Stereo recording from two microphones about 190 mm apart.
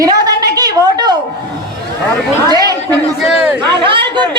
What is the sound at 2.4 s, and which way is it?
Speech, 20° right (ahead or behind).